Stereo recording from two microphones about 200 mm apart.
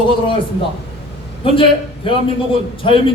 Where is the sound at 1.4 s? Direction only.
25° left (ahead or behind).